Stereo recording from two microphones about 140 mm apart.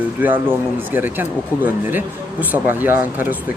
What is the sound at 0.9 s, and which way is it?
Speech, 15° right (ahead or behind).